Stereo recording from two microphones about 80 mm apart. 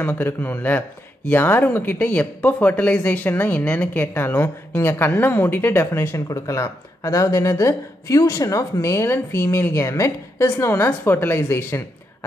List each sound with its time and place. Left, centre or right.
0.1 s speech: left
6.1 s speech: left